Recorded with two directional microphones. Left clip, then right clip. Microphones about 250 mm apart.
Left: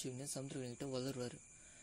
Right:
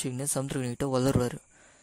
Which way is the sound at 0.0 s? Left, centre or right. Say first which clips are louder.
Right 14 dB; right.